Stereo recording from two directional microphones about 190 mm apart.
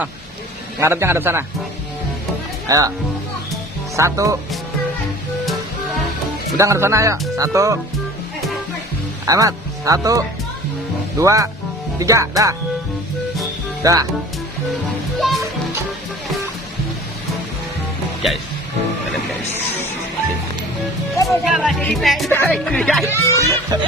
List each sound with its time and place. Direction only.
0.8 s speech: 15° right (ahead or behind)
2.6 s speech: 20° right (ahead or behind)
3.9 s speech: 15° right (ahead or behind)
6.6 s speech: 15° right (ahead or behind)
9.2 s speech: 20° right (ahead or behind)
13.8 s speech: 20° right (ahead or behind)
21.2 s speech: 5° right (ahead or behind); by 23.5 s 15° left (ahead or behind)
23.7 s music: 20° right (ahead or behind)